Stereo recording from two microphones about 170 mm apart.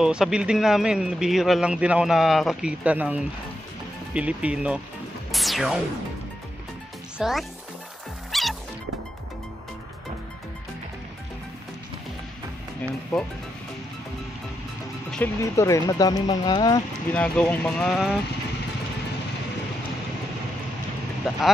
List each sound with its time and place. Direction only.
0.0 s speech: 5° right (ahead or behind)
5.3 s music: centre (ahead or behind)
7.2 s speech: centre (ahead or behind)
8.3 s music: centre (ahead or behind)
15.0 s music: 5° left (ahead or behind)
15.4 s speech: 20° left (ahead or behind)
17.1 s speech: 5° left (ahead or behind)
21.2 s speech: centre (ahead or behind)